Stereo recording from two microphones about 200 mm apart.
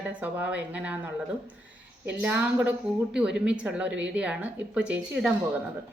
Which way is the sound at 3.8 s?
65° right (ahead or behind).